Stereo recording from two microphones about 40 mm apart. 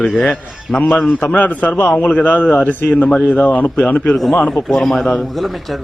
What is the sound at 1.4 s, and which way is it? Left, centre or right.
A man's voice, left.